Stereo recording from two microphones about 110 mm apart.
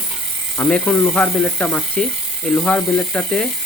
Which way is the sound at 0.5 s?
10° left (ahead or behind).